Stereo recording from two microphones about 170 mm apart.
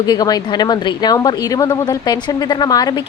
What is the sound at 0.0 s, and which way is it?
Speech, 25° left (ahead or behind).